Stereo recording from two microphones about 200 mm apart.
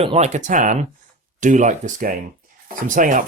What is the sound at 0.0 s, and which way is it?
Speech, 30° right (ahead or behind).